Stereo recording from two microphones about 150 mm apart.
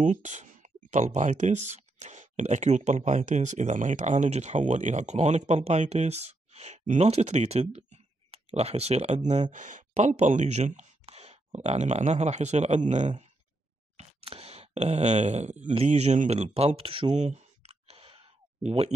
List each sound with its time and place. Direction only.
0.0 s speech: 55° right (ahead or behind)
13.9 s speech: 40° right (ahead or behind)
17.1 s clicking: 50° right (ahead or behind)